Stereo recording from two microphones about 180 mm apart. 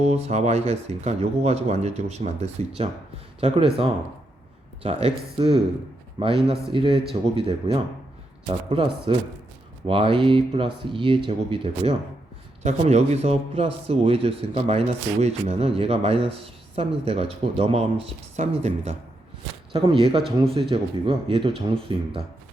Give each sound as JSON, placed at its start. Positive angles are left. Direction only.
{"t": 0.0, "sound": "speech", "side_deg": -40}
{"t": 19.7, "sound": "speech", "side_deg": -30}